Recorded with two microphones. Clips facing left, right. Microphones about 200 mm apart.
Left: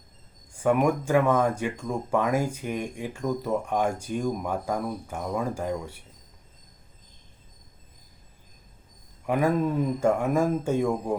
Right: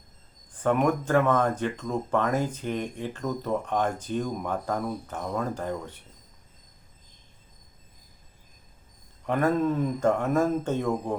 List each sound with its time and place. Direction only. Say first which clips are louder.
0.5 s speech: left 1 dB; 10° left (ahead or behind)
9.2 s speech: even; 10° left (ahead or behind)